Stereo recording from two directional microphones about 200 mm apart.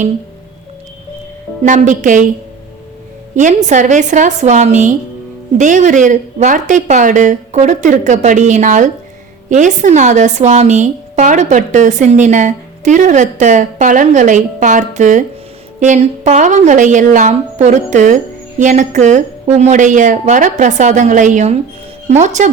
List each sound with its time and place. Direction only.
1.6 s a woman's voice: 40° right (ahead or behind)
3.3 s a woman's voice: 35° right (ahead or behind)